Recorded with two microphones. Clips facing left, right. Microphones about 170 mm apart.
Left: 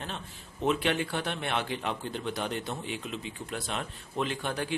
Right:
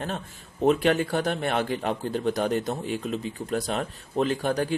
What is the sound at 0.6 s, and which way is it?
A man's voice, 40° right (ahead or behind).